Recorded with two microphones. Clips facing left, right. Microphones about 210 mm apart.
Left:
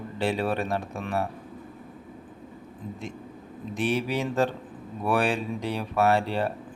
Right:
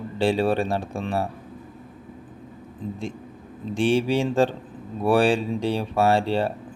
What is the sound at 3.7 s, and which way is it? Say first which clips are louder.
Speech: right 6 dB; 30° right (ahead or behind).